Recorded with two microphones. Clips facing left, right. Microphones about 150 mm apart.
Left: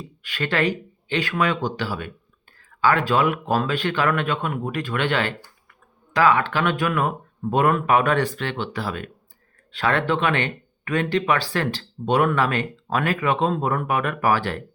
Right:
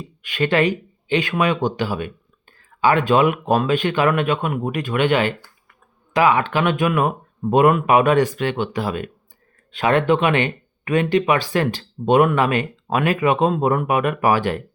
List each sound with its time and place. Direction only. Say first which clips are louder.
0.2 s speech: right 5 dB; 20° right (ahead or behind)